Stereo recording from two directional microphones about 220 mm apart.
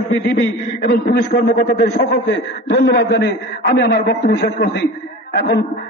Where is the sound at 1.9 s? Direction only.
50° left (ahead or behind).